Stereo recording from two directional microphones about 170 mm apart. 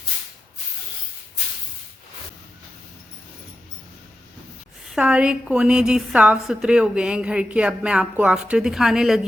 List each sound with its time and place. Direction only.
4.9 s a woman's voice: 5° right (ahead or behind)